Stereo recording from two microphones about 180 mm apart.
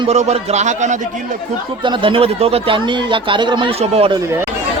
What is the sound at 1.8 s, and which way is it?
Speech, 25° right (ahead or behind).